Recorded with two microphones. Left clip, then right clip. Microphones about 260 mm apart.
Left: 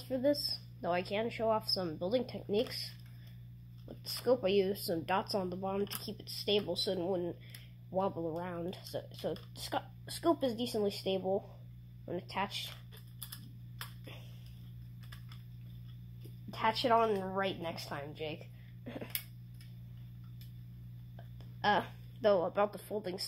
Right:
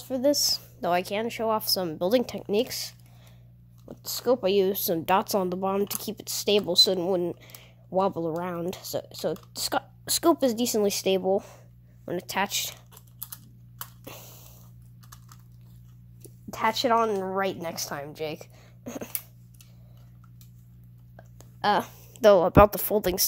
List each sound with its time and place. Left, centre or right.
0.1 s speech: right
3.9 s a sound: right
4.2 s speech: right
14.0 s biting: right
16.4 s speech: right
21.5 s a woman's voice: right